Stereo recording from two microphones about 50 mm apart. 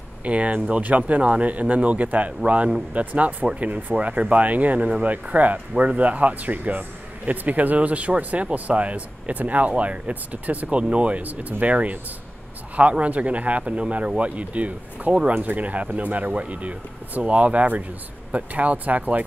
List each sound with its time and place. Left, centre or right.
0.2 s speech: right